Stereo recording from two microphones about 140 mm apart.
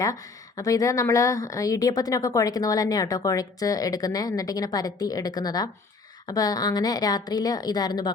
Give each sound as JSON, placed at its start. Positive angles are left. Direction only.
{"t": 0.0, "sound": "a woman's voice", "side_deg": 25}